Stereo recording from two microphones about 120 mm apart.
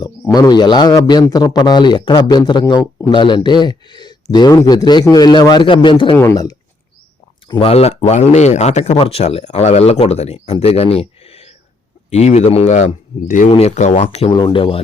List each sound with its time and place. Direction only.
0.3 s a man's voice: 30° left (ahead or behind)
6.1 s speech: 25° left (ahead or behind)
7.4 s speech: 45° left (ahead or behind); by 9.0 s 70° left (ahead or behind)
9.0 s speech: 55° left (ahead or behind); by 13.5 s 90° left
13.5 s speech: 60° left (ahead or behind)
14.3 s speech: 40° left (ahead or behind)